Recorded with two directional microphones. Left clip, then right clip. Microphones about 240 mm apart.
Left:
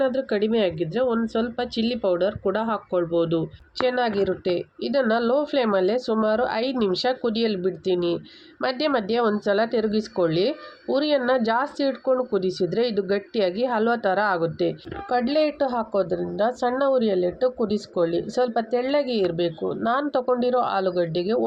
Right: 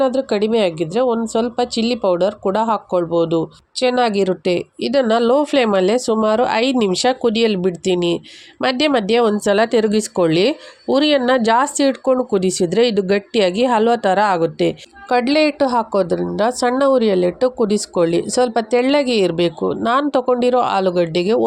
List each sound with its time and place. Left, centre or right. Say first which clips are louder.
0.0 s a woman's voice: right 6 dB; right